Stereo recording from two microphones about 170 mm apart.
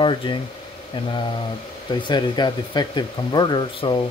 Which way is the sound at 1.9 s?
25° left (ahead or behind).